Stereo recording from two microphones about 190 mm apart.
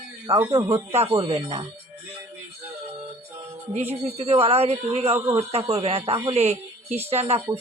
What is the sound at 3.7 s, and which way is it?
A woman's voice, 35° right (ahead or behind).